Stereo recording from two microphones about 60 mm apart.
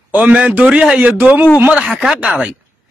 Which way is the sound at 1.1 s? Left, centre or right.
Right.